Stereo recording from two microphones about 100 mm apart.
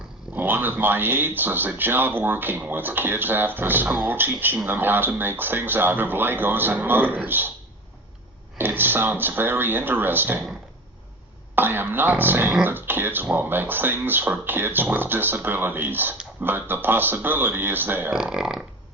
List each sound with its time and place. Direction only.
0.3 s speech: 20° right (ahead or behind)
8.5 s speech: 20° right (ahead or behind)
11.5 s speech: 20° right (ahead or behind)
18.1 s speech: 5° right (ahead or behind)